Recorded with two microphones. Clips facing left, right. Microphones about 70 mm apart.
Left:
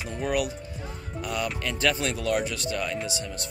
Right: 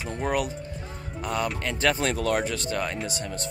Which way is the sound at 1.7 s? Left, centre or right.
Right.